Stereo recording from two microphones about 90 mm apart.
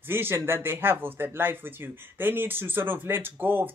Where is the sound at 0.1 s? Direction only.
25° right (ahead or behind).